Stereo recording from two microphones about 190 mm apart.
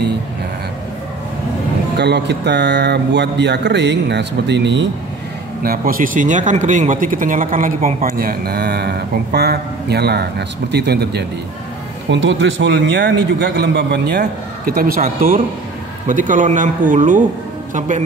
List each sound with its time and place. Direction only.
2.0 s a man's voice: 60° right (ahead or behind)
5.6 s a man's voice: 50° right (ahead or behind)
12.1 s a man's voice: 75° right (ahead or behind); by 18.0 s 40° right (ahead or behind)